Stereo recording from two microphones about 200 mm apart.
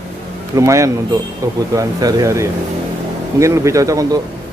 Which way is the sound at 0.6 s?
15° right (ahead or behind).